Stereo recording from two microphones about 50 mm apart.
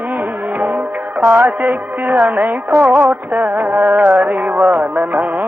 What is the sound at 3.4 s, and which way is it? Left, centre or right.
Music, right.